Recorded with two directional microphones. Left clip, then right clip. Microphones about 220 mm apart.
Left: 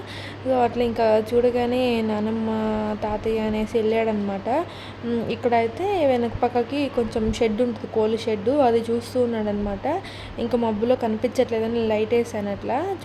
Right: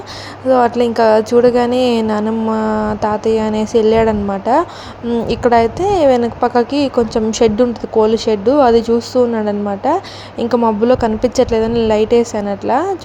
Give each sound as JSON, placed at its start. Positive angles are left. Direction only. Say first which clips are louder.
{"t": 0.5, "sound": "a woman's voice", "louder": "right 9 dB", "side_deg": -15}